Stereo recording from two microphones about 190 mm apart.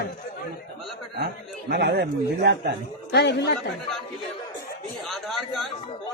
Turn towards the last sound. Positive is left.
turn(degrees=0)  # may be behind; listen again after turning